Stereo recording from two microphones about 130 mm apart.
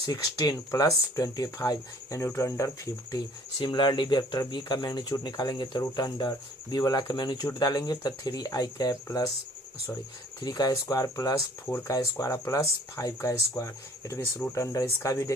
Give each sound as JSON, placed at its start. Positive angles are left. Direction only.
{"t": 0.0, "sound": "speech", "side_deg": 30}
{"t": 10.4, "sound": "speech", "side_deg": 30}